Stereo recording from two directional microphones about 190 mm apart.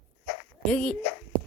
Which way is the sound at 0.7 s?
5° left (ahead or behind).